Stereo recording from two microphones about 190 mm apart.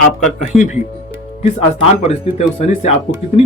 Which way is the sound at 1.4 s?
35° left (ahead or behind).